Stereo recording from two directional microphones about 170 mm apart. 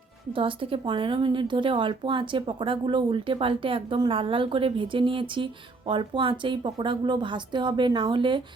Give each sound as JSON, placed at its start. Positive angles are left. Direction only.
{"t": 0.3, "sound": "a woman's voice", "side_deg": -30}